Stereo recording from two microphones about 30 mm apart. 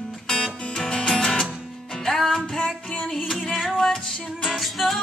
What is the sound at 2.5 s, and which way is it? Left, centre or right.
Music, left.